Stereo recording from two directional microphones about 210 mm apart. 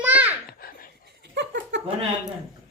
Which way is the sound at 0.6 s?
45° left (ahead or behind).